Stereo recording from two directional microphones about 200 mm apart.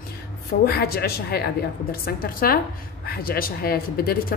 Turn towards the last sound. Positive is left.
turn(degrees=50)  # may be behind; listen again after turning